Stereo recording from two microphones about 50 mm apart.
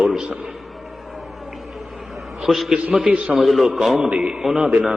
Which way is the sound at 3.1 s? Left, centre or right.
Right.